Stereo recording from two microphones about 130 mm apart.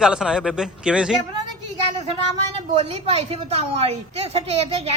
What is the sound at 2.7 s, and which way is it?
A woman's voice, 55° right (ahead or behind).